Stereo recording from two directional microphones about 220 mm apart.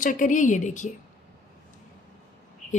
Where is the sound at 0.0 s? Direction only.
35° left (ahead or behind).